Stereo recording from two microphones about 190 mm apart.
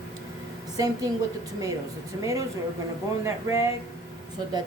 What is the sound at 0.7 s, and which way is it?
Speech, 20° right (ahead or behind).